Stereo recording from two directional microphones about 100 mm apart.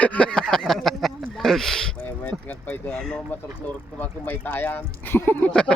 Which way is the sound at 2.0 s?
20° left (ahead or behind).